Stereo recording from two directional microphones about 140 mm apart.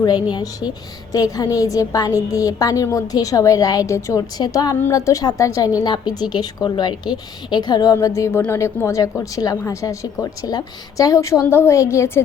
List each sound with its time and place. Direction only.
1.1 s speech: 25° left (ahead or behind)